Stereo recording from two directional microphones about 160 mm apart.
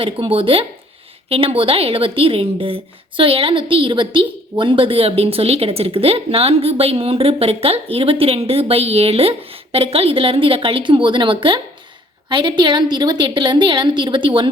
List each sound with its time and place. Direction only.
0.0 s a woman's voice: 35° right (ahead or behind)